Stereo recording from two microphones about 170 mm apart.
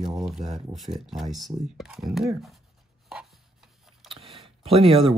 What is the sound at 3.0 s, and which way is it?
Chopping, centre (ahead or behind).